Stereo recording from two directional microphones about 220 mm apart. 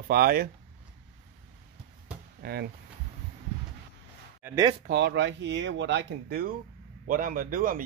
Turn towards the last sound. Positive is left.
turn(degrees=-40)  # may be behind; listen again after turning